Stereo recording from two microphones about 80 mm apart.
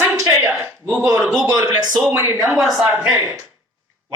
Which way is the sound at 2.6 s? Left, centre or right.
Centre.